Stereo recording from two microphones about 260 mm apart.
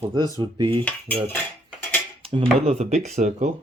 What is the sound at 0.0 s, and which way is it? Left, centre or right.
Cutlery, centre.